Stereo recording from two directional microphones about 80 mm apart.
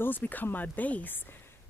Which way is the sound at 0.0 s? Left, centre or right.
Left.